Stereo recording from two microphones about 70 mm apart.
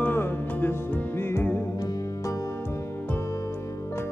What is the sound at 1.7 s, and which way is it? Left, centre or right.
Music, left.